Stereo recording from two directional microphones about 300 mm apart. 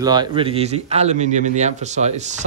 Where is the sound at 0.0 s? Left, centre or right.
Centre.